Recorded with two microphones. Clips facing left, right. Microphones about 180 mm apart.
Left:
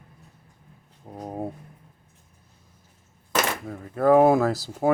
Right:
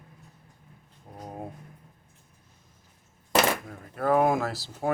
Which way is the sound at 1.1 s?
40° left (ahead or behind).